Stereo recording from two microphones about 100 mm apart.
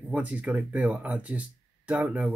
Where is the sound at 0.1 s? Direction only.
15° right (ahead or behind).